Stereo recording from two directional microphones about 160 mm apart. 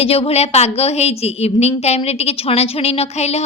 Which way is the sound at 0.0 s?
40° left (ahead or behind).